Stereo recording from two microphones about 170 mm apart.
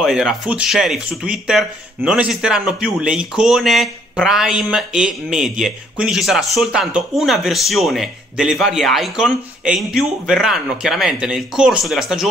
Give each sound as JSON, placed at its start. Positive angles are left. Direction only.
{"t": 0.0, "sound": "speech", "side_deg": 0}